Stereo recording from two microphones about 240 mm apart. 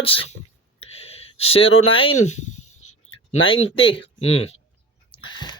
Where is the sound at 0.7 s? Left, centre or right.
Left.